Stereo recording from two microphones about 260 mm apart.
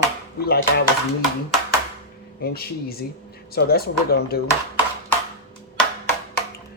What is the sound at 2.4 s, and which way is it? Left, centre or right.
Speech, left.